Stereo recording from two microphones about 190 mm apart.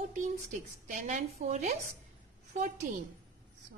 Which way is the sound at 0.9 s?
40° right (ahead or behind).